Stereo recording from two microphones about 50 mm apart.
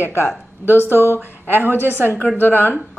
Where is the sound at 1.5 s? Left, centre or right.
Right.